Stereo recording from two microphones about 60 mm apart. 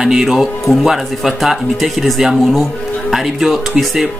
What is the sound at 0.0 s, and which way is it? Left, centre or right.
Speech, centre.